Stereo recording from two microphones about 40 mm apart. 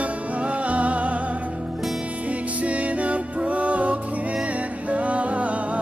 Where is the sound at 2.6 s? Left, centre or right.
Right.